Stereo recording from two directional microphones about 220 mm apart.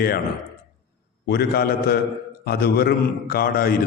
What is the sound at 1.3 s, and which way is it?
A man's voice, 45° left (ahead or behind).